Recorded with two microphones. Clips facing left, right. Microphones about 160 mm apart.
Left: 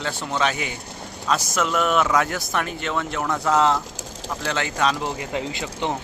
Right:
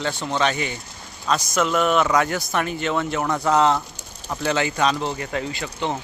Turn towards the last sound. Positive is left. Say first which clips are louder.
# even
turn(degrees=15)  # may be behind; listen again after turning